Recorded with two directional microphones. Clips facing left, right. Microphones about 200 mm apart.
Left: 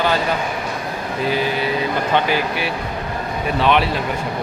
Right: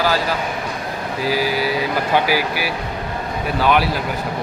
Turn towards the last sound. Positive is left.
turn(degrees=-5)  # may be behind; listen again after turning